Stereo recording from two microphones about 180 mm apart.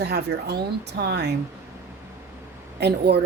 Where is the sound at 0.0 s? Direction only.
65° right (ahead or behind).